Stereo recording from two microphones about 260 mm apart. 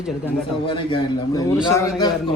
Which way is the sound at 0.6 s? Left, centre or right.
Centre.